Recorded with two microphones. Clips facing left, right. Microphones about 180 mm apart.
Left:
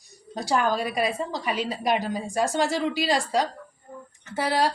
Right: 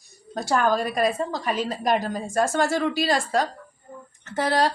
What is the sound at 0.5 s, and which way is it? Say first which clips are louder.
Speech: right 2 dB; 45° right (ahead or behind).